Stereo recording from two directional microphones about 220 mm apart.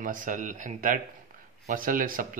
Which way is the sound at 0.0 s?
35° right (ahead or behind).